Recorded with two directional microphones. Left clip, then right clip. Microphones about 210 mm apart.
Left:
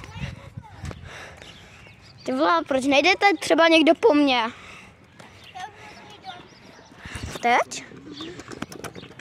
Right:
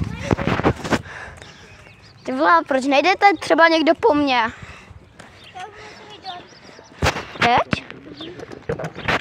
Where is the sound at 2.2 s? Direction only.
Centre (ahead or behind).